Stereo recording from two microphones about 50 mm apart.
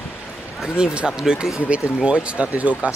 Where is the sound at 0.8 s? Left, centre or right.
Centre.